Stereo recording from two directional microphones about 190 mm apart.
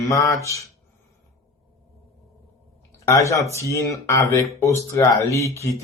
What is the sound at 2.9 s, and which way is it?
Speech, 15° left (ahead or behind).